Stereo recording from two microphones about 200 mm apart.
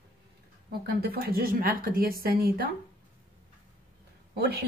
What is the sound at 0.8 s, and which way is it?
A woman's voice, 50° right (ahead or behind).